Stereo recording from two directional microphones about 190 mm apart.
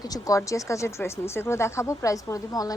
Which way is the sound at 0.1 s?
15° left (ahead or behind).